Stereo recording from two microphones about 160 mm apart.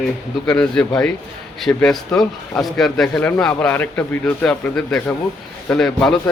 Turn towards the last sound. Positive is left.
turn(degrees=5)  # may be behind; listen again after turning